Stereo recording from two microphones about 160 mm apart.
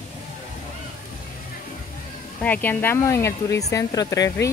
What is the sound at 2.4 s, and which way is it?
Speech, 10° left (ahead or behind).